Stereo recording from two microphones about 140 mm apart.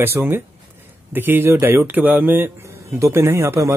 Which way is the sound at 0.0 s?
15° right (ahead or behind).